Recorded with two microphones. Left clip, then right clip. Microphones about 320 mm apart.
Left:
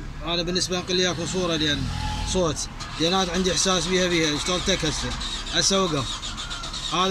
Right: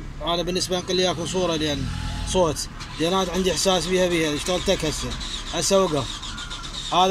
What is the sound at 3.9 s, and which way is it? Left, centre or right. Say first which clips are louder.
Speech: right 1 dB; right.